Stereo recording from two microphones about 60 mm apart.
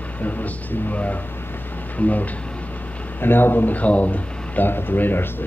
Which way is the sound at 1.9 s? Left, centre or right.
Left.